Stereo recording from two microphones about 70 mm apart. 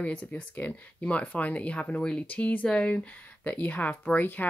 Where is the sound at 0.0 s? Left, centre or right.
Left.